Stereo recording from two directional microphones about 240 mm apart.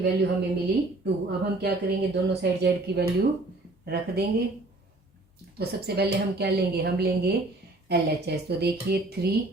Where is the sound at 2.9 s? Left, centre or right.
Right.